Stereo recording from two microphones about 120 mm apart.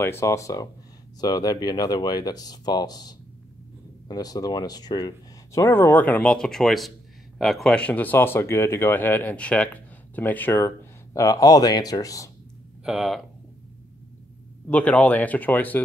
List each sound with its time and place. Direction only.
0.0 s speech: 20° left (ahead or behind)
12.8 s speech: centre (ahead or behind)
14.7 s speech: 10° left (ahead or behind)